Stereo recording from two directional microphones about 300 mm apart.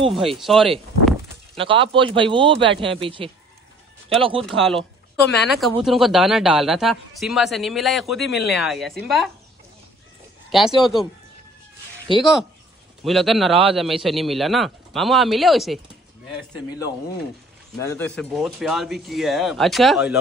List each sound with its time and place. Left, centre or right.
0.1 s a sound: centre
1.6 s speech: centre
4.5 s speech: centre
10.5 s speech: centre
12.2 s speech: centre
17.7 s speech: centre